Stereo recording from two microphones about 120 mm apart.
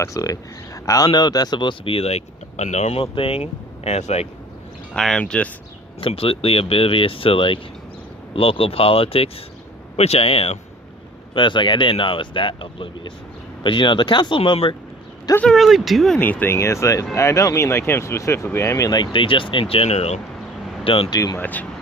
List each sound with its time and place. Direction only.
0.0 s speech: 30° left (ahead or behind); by 4.3 s 60° left (ahead or behind)
4.9 s speech: 5° left (ahead or behind)
6.0 s a man's voice: 50° left (ahead or behind)
11.3 s speech: 40° left (ahead or behind)
15.4 s speech: centre (ahead or behind)
16.2 s speech: 15° left (ahead or behind); by 20.2 s 65° left (ahead or behind)
20.8 s speech: 50° left (ahead or behind)
21.1 s speech: 35° left (ahead or behind)
21.3 s speech: 15° left (ahead or behind)